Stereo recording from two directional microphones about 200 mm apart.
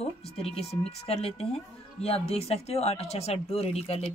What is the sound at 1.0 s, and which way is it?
A woman's voice, 30° left (ahead or behind).